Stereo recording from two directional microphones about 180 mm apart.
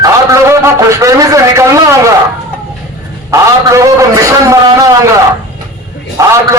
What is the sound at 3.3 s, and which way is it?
A man's voice, 15° right (ahead or behind).